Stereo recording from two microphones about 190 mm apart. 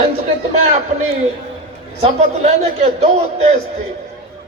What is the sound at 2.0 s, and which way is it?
A man's voice, 35° right (ahead or behind).